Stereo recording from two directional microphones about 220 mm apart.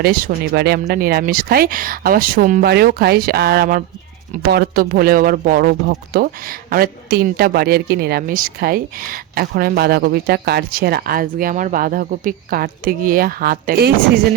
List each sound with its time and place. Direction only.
0.0 s speech: 45° right (ahead or behind)